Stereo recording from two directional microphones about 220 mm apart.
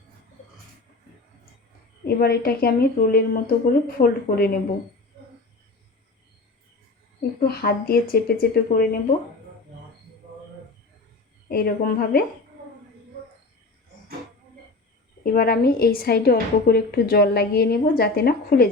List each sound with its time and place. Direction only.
2.0 s a woman's voice: 45° left (ahead or behind)
7.4 s a woman's voice: 45° left (ahead or behind)
11.4 s a woman's voice: 45° left (ahead or behind)
15.2 s a woman's voice: 40° left (ahead or behind)